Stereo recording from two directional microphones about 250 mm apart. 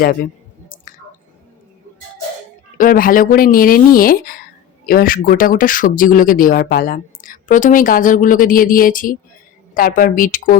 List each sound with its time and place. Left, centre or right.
0.0 s speech: left
2.7 s speech: left